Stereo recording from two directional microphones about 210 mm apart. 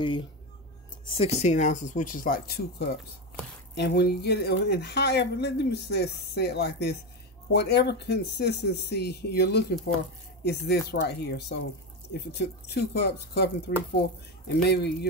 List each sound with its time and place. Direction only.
0.0 s speech: 25° left (ahead or behind); by 15.0 s 50° left (ahead or behind)